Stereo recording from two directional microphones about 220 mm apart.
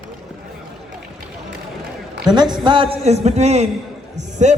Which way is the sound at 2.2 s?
20° right (ahead or behind).